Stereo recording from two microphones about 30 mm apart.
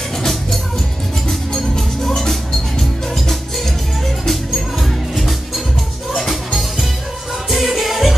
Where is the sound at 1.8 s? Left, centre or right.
Centre.